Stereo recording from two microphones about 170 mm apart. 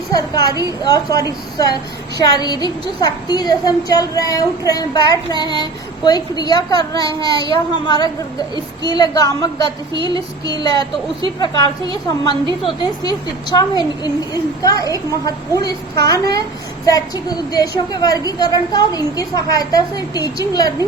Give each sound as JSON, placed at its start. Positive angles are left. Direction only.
{"t": 0.1, "sound": "a woman's voice", "side_deg": 20}